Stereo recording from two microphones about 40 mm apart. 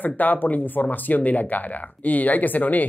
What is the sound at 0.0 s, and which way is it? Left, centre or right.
Speech, left.